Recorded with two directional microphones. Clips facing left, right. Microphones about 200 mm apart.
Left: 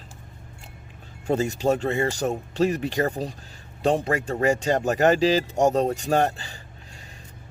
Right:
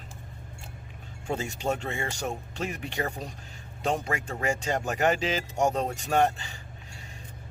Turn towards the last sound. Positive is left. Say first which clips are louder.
# left 2 dB
turn(degrees=35)  # may be behind; listen again after turning